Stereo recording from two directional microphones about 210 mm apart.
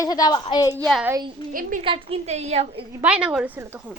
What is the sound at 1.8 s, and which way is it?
A woman's voice, 25° right (ahead or behind).